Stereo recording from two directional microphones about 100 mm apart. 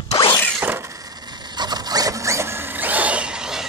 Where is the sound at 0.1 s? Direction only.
50° left (ahead or behind).